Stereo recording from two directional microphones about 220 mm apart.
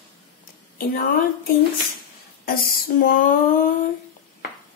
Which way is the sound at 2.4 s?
40° left (ahead or behind).